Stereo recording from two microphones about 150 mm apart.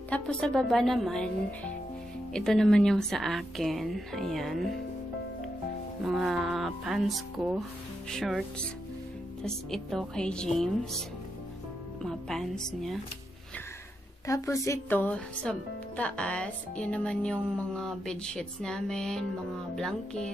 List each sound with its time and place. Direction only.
0.1 s a woman's voice: 5° left (ahead or behind)
6.0 s a woman's voice: 5° right (ahead or behind)
14.2 s a woman's voice: 20° left (ahead or behind); by 20.2 s 5° left (ahead or behind)